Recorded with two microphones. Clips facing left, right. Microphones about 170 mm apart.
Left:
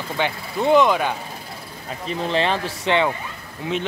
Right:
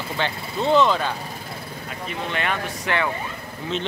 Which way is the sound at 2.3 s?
30° left (ahead or behind).